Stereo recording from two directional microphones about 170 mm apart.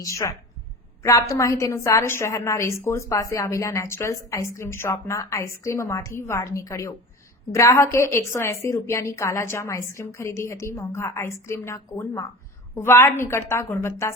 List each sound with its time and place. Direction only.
0.0 s a woman's voice: 20° left (ahead or behind)